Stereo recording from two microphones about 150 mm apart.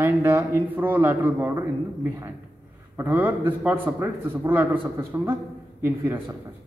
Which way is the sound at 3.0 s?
15° right (ahead or behind).